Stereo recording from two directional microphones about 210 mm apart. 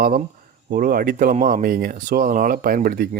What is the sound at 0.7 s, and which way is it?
Speech, 45° right (ahead or behind).